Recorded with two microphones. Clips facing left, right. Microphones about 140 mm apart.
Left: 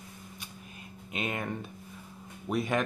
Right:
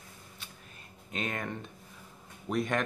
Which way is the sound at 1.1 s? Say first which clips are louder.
Left 2 dB; 10° left (ahead or behind).